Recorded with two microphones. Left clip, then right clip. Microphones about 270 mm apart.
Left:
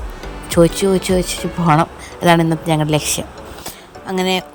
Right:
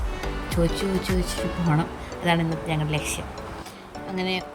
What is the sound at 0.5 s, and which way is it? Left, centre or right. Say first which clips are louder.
Speech: left 13 dB; centre.